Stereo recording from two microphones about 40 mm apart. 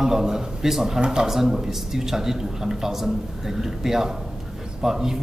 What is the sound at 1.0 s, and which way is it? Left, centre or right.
Speech, right.